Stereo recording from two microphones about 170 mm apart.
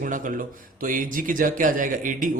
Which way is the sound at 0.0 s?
50° right (ahead or behind).